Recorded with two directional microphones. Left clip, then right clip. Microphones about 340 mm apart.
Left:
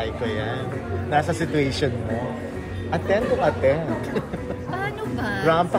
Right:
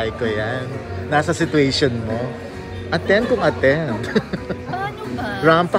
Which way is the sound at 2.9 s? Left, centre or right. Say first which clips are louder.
Right 4 dB; right.